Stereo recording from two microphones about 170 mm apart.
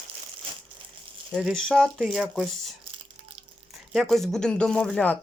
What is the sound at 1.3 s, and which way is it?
Speech, centre (ahead or behind).